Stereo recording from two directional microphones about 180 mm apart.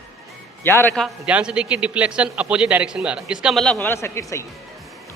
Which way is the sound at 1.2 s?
5° right (ahead or behind).